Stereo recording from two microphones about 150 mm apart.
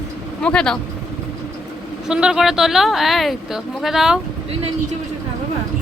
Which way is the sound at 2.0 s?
5° right (ahead or behind).